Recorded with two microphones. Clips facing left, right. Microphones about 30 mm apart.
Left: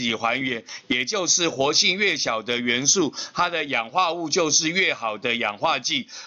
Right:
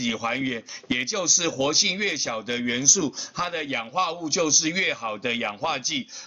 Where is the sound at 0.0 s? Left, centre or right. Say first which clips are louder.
Left 3 dB; centre.